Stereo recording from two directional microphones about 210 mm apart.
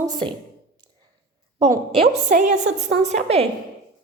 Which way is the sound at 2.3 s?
35° right (ahead or behind).